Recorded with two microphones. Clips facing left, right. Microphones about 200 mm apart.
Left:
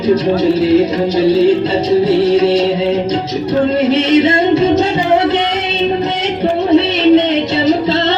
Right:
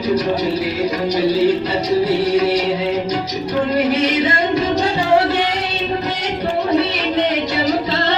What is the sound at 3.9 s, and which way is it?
Music, 25° left (ahead or behind).